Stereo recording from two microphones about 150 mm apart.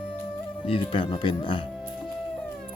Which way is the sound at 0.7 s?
35° left (ahead or behind).